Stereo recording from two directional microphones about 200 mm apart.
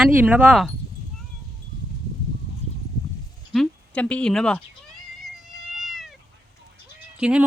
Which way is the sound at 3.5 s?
5° left (ahead or behind).